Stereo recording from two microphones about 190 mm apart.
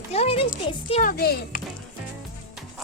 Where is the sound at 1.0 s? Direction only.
50° left (ahead or behind).